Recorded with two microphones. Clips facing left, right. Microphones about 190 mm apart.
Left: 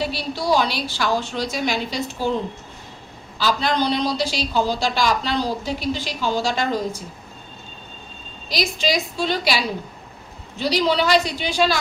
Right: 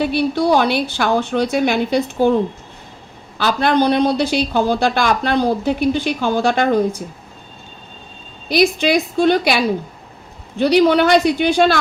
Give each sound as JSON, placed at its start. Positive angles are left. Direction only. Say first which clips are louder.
{"t": 0.0, "sound": "speech", "louder": "right 8 dB", "side_deg": -55}
{"t": 8.4, "sound": "speech", "louder": "right 8 dB", "side_deg": -55}